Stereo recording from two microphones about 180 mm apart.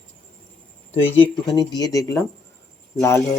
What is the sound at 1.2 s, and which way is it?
Speech, 20° left (ahead or behind).